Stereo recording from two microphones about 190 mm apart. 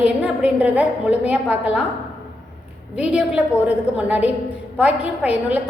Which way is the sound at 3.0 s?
5° right (ahead or behind).